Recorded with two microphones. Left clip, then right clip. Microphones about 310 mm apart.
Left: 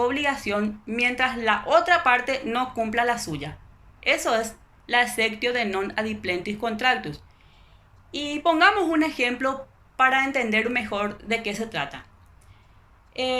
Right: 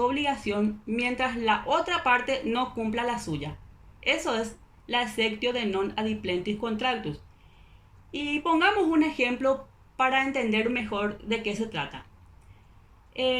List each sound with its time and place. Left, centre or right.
0.0 s speech: centre
13.1 s speech: centre